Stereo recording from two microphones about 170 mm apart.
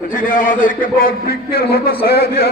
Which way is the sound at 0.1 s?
55° left (ahead or behind).